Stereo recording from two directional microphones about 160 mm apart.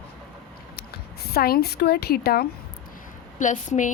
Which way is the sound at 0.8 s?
80° left.